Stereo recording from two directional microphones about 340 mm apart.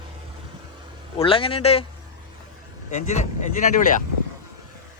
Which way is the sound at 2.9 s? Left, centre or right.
Centre.